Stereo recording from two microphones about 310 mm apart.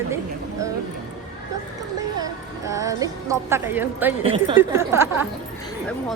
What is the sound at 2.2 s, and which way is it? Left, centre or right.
A woman's voice, centre.